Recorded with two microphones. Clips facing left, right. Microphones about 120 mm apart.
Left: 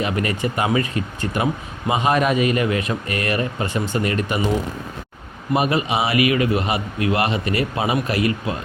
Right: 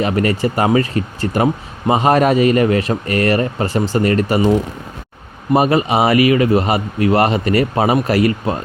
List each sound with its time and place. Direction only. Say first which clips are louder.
0.0 s a man's voice: right 6 dB; 40° right (ahead or behind)
5.5 s a man's voice: right 6 dB; 40° right (ahead or behind)